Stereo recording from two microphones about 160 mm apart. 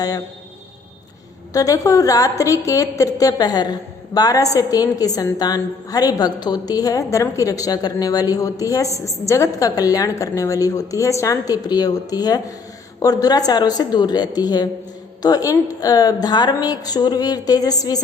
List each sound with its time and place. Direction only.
1.5 s a woman's voice: 20° left (ahead or behind)